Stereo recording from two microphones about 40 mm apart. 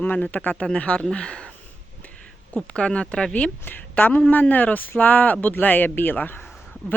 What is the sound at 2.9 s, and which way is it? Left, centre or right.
Speech, left.